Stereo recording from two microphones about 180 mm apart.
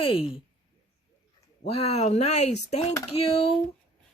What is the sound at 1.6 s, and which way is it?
Speech, 35° left (ahead or behind).